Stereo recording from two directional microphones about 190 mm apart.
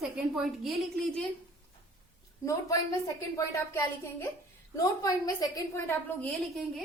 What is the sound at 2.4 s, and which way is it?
Speech, 15° left (ahead or behind).